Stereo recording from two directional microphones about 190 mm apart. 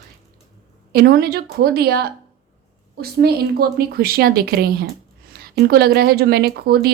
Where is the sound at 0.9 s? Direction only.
55° right (ahead or behind).